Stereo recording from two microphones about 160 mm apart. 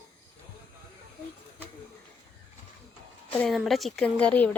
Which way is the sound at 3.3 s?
5° left (ahead or behind).